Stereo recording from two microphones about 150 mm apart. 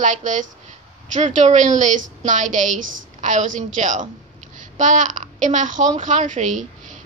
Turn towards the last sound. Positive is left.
turn(degrees=-55)  # may be behind; listen again after turning